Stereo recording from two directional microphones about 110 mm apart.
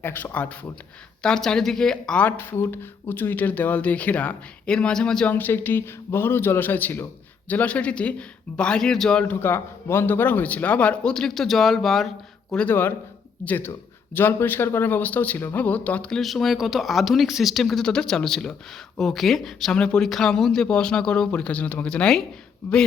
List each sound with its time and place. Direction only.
0.0 s speech: 20° left (ahead or behind)
9.2 s speech: 20° left (ahead or behind); by 12.6 s 5° left (ahead or behind)
12.6 s speech: 20° left (ahead or behind)